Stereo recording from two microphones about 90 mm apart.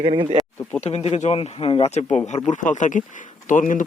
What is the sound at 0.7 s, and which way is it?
Speech, 90° left.